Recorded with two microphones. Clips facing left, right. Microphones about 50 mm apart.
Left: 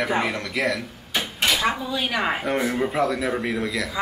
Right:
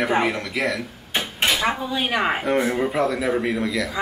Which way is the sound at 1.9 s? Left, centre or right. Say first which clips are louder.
Right 2 dB; right.